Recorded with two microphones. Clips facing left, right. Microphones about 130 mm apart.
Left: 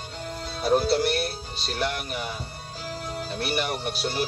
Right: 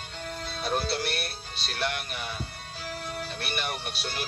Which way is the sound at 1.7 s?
40° left (ahead or behind).